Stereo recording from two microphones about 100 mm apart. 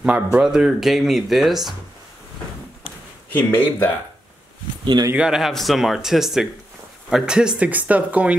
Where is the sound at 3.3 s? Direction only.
15° left (ahead or behind).